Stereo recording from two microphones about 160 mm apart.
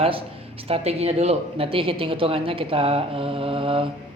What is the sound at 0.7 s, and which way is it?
Speech, 40° right (ahead or behind).